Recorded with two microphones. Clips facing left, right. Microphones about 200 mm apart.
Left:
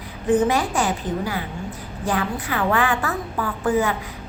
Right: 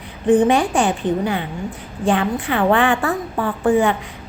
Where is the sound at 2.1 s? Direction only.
25° right (ahead or behind).